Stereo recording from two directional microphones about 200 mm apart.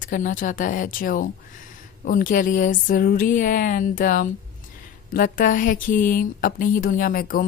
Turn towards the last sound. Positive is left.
turn(degrees=45)  # may be behind; listen again after turning